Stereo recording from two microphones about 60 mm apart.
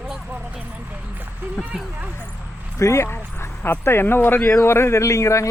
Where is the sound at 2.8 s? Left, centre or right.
Left.